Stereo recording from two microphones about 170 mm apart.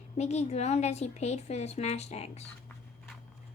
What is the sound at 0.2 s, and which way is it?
A woman's voice, 40° left (ahead or behind).